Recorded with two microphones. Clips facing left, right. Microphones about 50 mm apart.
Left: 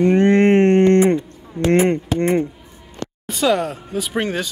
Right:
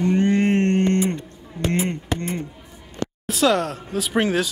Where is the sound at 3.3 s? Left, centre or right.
Centre.